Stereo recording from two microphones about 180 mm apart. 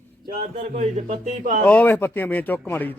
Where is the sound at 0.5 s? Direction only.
40° right (ahead or behind).